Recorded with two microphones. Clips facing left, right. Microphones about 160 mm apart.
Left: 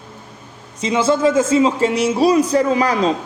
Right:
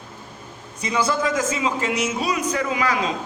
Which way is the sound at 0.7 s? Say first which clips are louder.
Left 6 dB; 25° left (ahead or behind).